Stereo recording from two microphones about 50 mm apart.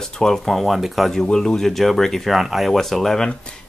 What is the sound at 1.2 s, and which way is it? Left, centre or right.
Speech, centre.